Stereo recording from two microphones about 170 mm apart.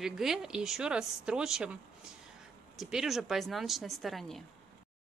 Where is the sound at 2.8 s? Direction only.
Centre (ahead or behind).